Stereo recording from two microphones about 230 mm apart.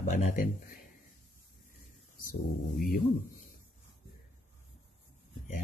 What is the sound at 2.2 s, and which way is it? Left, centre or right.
Speech, left.